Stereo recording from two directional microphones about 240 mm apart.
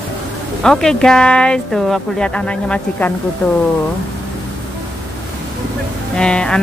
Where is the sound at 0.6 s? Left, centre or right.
Centre.